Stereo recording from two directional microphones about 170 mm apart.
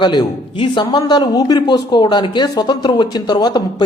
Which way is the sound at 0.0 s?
25° left (ahead or behind).